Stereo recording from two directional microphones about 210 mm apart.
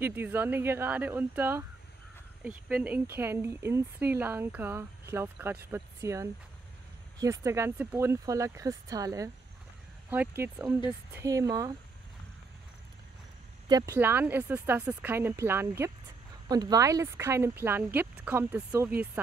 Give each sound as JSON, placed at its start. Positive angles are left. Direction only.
{"t": 0.0, "sound": "speech", "side_deg": -10}
{"t": 13.7, "sound": "speech", "side_deg": -15}